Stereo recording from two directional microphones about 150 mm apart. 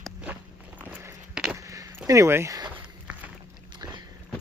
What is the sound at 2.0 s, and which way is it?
Speech, 20° right (ahead or behind).